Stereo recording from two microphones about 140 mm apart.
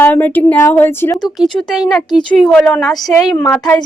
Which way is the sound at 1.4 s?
Centre (ahead or behind).